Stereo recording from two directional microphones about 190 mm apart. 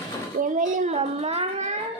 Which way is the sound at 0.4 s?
40° right (ahead or behind).